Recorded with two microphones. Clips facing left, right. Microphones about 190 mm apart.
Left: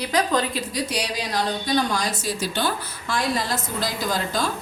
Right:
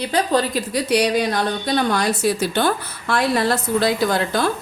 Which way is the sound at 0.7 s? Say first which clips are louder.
Right 9 dB; 65° right (ahead or behind).